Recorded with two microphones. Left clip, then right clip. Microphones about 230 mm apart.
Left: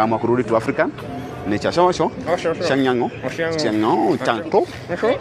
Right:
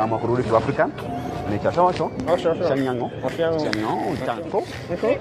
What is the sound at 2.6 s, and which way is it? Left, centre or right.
Speech, left.